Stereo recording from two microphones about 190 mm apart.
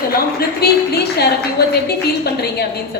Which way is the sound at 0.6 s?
55° left (ahead or behind).